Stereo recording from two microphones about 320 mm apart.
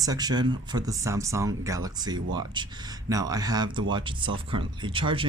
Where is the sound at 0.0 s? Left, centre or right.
Centre.